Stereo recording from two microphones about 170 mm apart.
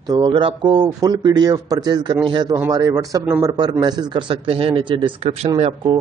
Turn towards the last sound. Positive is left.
turn(degrees=-30)  # may be behind; listen again after turning